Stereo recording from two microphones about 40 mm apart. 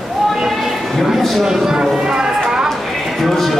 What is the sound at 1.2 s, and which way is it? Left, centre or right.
Speech, centre.